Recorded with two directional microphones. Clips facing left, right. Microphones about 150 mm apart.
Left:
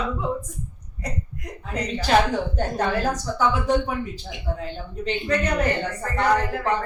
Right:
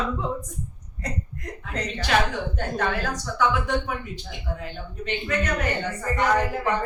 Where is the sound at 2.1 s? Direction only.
35° left (ahead or behind).